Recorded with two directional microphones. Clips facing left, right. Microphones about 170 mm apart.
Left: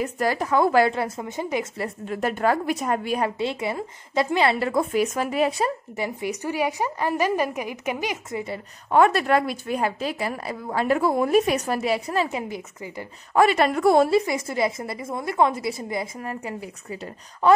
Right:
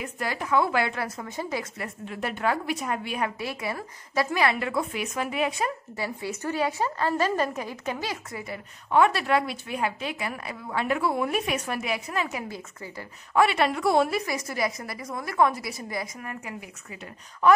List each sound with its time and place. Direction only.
0.0 s a woman's voice: 40° left (ahead or behind)
0.9 s a woman's voice: 25° left (ahead or behind)
2.0 s a woman's voice: 45° left (ahead or behind)
3.3 s a woman's voice: 25° left (ahead or behind)
5.9 s a woman's voice: 20° left (ahead or behind)
8.9 s a woman's voice: 45° left (ahead or behind); by 12.9 s 20° left (ahead or behind)
13.3 s a woman's voice: 40° left (ahead or behind)
14.0 s a woman's voice: 25° left (ahead or behind)